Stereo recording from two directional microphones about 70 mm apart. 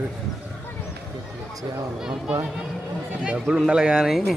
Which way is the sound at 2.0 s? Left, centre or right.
Centre.